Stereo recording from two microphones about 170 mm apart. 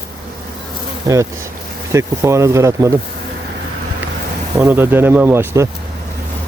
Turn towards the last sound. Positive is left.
turn(degrees=-15)  # may be behind; listen again after turning